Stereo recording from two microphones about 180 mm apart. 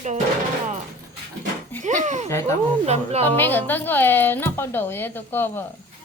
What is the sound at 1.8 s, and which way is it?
A woman's voice, 45° right (ahead or behind).